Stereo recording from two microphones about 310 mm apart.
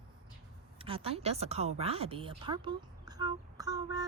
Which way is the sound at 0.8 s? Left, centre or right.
Centre.